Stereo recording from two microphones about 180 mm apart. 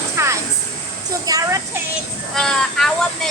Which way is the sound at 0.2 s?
15° right (ahead or behind).